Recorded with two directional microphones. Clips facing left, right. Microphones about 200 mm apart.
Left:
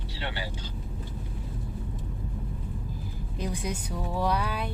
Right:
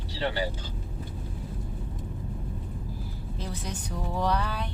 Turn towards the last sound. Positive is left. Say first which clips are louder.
# even
turn(degrees=10)  # may be behind; listen again after turning